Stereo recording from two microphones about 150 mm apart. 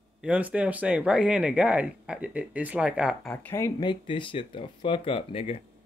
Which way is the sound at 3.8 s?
35° left (ahead or behind).